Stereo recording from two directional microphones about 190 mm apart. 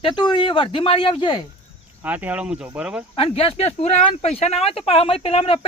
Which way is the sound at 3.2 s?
30° left (ahead or behind).